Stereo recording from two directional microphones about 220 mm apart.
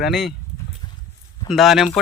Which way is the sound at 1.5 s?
Centre (ahead or behind).